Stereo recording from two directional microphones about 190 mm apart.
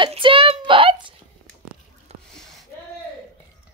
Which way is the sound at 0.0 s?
25° right (ahead or behind).